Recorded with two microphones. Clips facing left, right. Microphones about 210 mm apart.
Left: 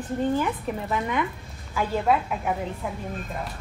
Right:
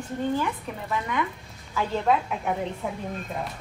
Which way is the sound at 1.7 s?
5° left (ahead or behind).